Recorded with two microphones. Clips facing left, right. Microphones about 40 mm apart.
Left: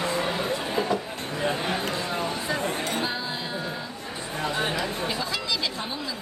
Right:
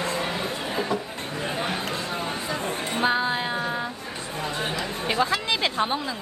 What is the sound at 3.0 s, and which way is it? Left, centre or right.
Music, right.